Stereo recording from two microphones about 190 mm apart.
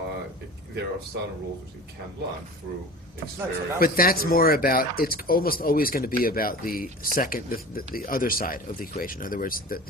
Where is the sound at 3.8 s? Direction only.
50° left (ahead or behind).